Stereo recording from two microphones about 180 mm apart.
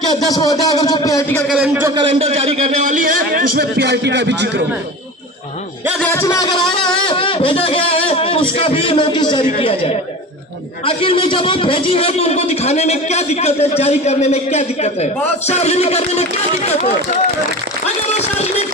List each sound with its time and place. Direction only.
0.3 s a man's voice: 20° left (ahead or behind)
1.5 s a man's voice: 5° right (ahead or behind)
2.0 s a man's voice: 30° right (ahead or behind); by 4.6 s 75° right (ahead or behind)
6.0 s a man's voice: 15° left (ahead or behind)
7.1 s a sound: 30° left (ahead or behind)
9.6 s a man's voice: 35° left (ahead or behind)
17.8 s a sound: 35° left (ahead or behind)